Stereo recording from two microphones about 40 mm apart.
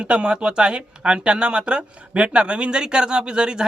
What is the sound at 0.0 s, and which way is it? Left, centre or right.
Speech, right.